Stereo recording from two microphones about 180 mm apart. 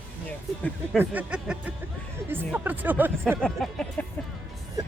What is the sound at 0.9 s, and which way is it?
Speech, 5° right (ahead or behind).